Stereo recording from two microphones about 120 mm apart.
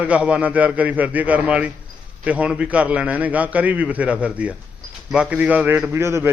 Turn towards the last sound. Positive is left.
turn(degrees=-20)  # may be behind; listen again after turning